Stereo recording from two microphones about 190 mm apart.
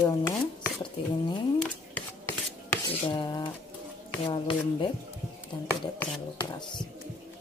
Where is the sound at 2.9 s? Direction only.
25° left (ahead or behind).